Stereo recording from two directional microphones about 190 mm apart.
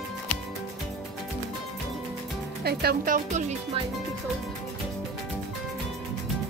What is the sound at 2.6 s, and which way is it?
Speech, 55° right (ahead or behind).